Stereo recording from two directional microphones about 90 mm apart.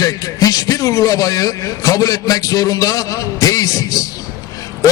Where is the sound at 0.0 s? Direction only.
40° left (ahead or behind).